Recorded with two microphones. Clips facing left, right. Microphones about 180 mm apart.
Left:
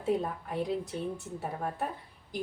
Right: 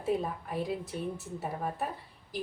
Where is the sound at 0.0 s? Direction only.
5° right (ahead or behind).